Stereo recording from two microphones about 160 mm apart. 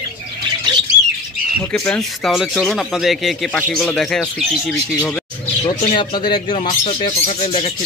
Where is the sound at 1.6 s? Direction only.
10° left (ahead or behind).